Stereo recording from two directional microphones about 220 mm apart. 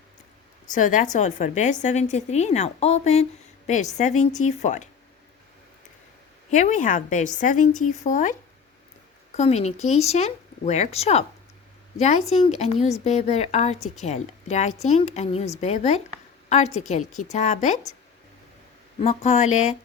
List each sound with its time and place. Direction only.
0.7 s a woman's voice: 35° left (ahead or behind)
6.5 s a woman's voice: 35° left (ahead or behind)
18.9 s a woman's voice: 30° left (ahead or behind)